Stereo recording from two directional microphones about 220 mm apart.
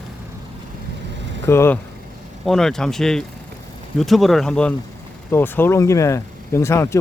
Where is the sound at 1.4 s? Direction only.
10° left (ahead or behind).